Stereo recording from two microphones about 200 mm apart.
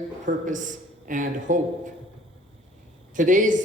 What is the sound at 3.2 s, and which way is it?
Speech, 40° right (ahead or behind).